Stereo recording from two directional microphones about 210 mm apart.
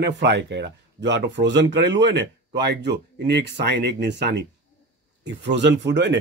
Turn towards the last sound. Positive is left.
turn(degrees=-55)  # may be behind; listen again after turning